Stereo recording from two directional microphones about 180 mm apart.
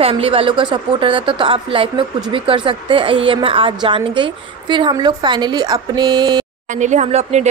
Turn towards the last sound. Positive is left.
turn(degrees=-40)  # may be behind; listen again after turning